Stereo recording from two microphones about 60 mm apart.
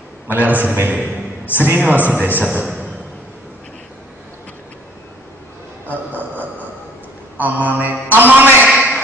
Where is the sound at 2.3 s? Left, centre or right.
Right.